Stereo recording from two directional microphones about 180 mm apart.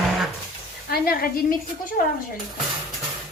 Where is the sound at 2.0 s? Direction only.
50° left (ahead or behind).